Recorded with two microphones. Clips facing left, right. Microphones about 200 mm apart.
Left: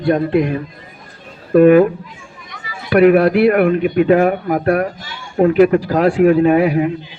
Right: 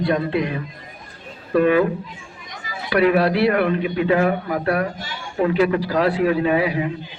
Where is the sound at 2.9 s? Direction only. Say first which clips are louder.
Left 7 dB; 50° left (ahead or behind).